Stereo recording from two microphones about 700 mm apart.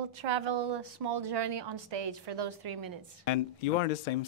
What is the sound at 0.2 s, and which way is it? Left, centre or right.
A woman's voice, right.